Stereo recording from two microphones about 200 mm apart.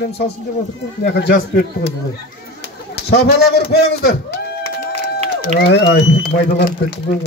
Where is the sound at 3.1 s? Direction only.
55° left (ahead or behind).